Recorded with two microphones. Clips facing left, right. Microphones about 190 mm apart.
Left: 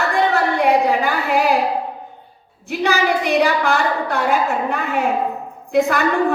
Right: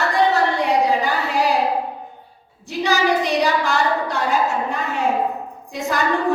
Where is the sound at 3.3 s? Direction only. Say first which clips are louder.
Left 2 dB; 60° left (ahead or behind).